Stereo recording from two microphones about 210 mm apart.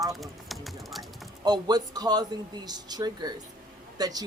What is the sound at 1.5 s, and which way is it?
Speech, 20° right (ahead or behind).